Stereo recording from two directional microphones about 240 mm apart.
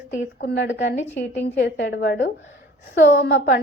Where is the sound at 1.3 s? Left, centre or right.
Left.